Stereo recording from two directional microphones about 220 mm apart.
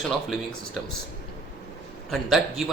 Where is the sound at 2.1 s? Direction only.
Centre (ahead or behind).